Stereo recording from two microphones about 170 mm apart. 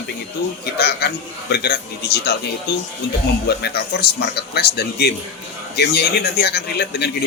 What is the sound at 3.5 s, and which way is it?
Speech, 70° left (ahead or behind).